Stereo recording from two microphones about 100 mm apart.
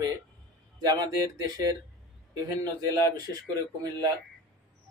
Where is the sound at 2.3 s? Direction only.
40° right (ahead or behind).